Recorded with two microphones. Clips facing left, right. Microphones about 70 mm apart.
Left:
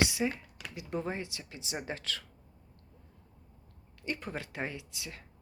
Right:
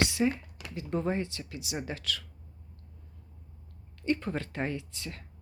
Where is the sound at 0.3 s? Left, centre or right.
Centre.